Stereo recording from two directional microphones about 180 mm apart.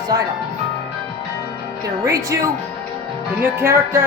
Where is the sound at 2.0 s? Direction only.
20° right (ahead or behind).